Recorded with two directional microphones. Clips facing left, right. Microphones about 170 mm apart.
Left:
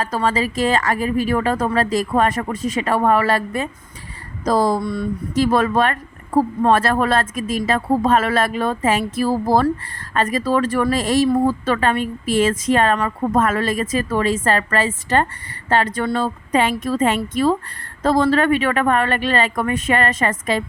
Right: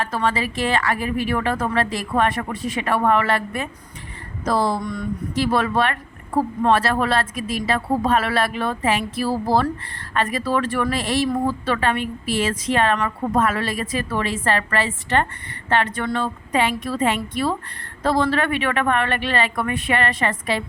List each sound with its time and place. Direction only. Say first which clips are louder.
0.0 s speech: left 3 dB; 40° left (ahead or behind)
4.8 s speech: left 4 dB; 30° left (ahead or behind)
5.3 s speech: left 4 dB; 45° left (ahead or behind)